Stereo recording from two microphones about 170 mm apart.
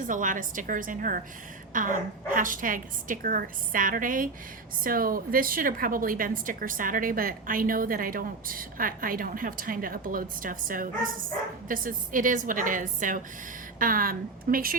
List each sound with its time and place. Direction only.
0.0 s a woman's voice: 50° right (ahead or behind)